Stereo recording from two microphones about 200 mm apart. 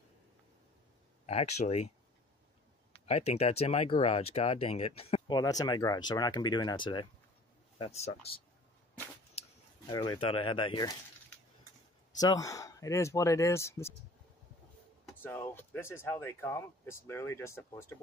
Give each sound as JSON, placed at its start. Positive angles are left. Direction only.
{"t": 1.2, "sound": "speech", "side_deg": 30}
{"t": 2.9, "sound": "speech", "side_deg": 35}
{"t": 5.4, "sound": "speech", "side_deg": 20}
{"t": 9.8, "sound": "speech", "side_deg": 25}
{"t": 12.2, "sound": "speech", "side_deg": 20}
{"t": 15.2, "sound": "speech", "side_deg": 10}